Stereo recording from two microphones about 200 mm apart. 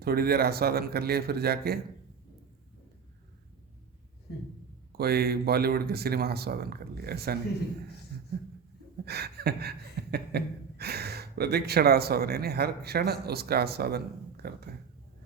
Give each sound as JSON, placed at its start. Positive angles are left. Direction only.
{"t": 0.0, "sound": "speech", "side_deg": -50}
{"t": 4.9, "sound": "speech", "side_deg": -50}
{"t": 8.1, "sound": "a sound", "side_deg": -50}
{"t": 14.4, "sound": "speech", "side_deg": -50}